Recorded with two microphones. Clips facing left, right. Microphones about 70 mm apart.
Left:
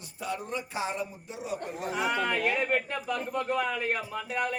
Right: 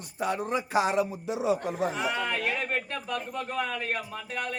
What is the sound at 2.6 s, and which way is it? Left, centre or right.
Speech, centre.